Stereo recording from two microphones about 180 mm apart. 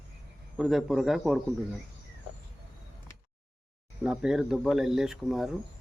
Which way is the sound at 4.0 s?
5° right (ahead or behind).